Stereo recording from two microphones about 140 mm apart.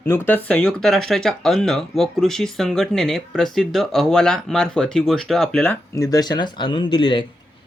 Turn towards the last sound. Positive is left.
turn(degrees=35)  # may be behind; listen again after turning